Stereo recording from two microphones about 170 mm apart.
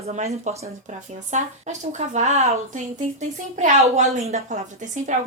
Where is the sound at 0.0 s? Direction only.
40° right (ahead or behind).